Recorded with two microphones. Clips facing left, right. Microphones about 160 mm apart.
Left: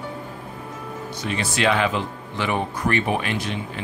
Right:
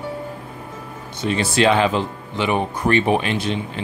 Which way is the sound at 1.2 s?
30° right (ahead or behind).